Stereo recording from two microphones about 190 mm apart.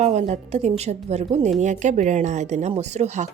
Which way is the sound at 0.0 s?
35° right (ahead or behind).